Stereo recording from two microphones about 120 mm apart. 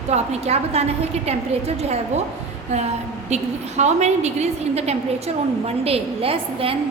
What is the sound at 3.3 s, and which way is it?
A woman's voice, 70° right (ahead or behind).